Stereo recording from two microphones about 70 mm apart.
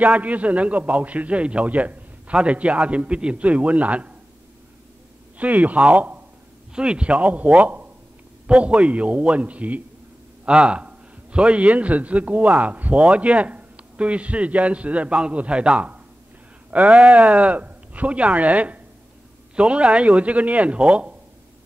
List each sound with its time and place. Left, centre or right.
0.0 s a man's voice: right
5.4 s a man's voice: right